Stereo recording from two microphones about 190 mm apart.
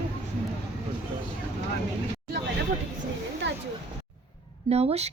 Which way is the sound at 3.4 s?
70° right (ahead or behind).